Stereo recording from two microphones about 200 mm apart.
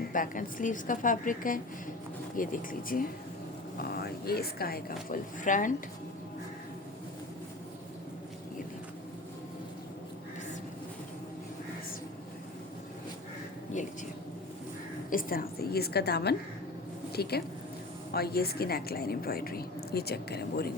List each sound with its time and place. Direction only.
0.1 s a woman's voice: 40° left (ahead or behind)
13.7 s speech: 40° left (ahead or behind)
15.1 s a woman's voice: 45° left (ahead or behind)